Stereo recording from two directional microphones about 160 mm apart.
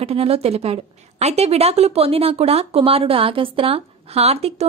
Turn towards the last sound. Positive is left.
turn(degrees=-40)  # may be behind; listen again after turning